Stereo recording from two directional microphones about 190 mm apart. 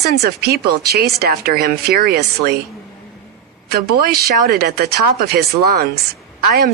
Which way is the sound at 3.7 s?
55° right (ahead or behind).